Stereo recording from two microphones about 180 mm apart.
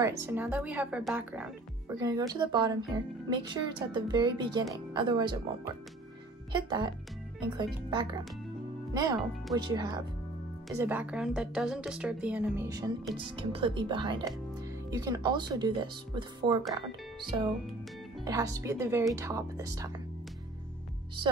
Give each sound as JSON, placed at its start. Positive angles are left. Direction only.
{"t": 0.3, "sound": "speech", "side_deg": -10}
{"t": 1.9, "sound": "speech", "side_deg": -20}
{"t": 6.5, "sound": "speech", "side_deg": -25}
{"t": 10.7, "sound": "speech", "side_deg": -10}
{"t": 13.4, "sound": "speech", "side_deg": -30}